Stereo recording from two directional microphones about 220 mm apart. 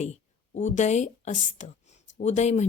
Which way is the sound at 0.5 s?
35° left (ahead or behind).